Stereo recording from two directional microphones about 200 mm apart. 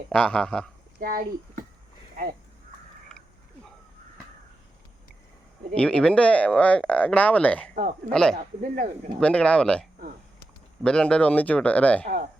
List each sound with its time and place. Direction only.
0.1 s speech: 5° left (ahead or behind)
0.9 s speech: 45° right (ahead or behind)
5.7 s speech: 5° left (ahead or behind)
8.4 s speech: 40° right (ahead or behind)
9.2 s speech: 5° left (ahead or behind)
10.8 s speech: 5° left (ahead or behind)
12.0 s speech: 45° right (ahead or behind)